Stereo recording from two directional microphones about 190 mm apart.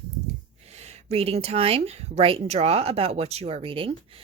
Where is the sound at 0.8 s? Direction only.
35° right (ahead or behind).